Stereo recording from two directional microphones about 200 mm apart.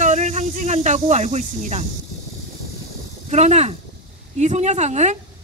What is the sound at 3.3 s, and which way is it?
Speech, 35° right (ahead or behind).